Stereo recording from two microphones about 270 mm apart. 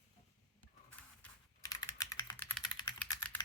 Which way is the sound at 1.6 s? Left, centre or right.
Centre.